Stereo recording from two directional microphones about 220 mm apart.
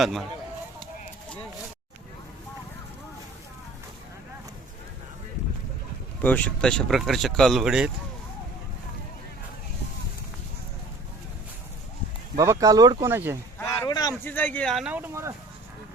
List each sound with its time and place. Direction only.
0.0 s speech: centre (ahead or behind)
6.2 s speech: 5° left (ahead or behind)
12.4 s speech: 15° right (ahead or behind)
13.6 s a sound: 15° left (ahead or behind)
14.3 s speech: 10° left (ahead or behind); by 15.3 s 10° right (ahead or behind)